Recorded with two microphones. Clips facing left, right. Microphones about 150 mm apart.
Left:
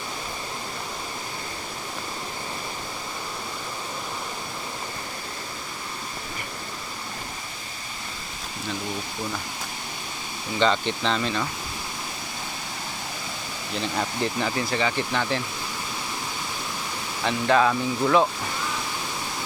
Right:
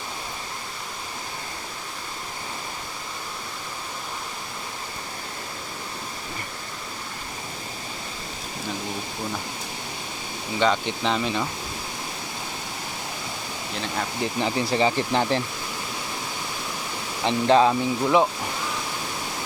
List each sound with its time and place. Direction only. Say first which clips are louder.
10.6 s speech: even; 10° right (ahead or behind)
14.2 s speech: right 2 dB; 20° right (ahead or behind)
14.7 s speech: right 4 dB; 30° right (ahead or behind)
17.2 s speech: right 3 dB; 25° right (ahead or behind)